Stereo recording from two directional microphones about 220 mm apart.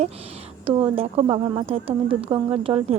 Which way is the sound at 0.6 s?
25° right (ahead or behind).